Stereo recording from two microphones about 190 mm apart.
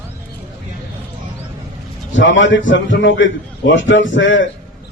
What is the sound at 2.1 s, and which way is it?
A man's voice, 80° left.